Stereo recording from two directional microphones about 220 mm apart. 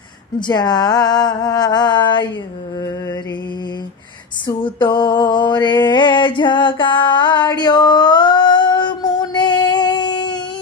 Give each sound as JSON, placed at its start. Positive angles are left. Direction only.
{"t": 0.3, "sound": "speech", "side_deg": 20}
{"t": 4.4, "sound": "a sound", "side_deg": 20}
{"t": 5.2, "sound": "mantra", "side_deg": 20}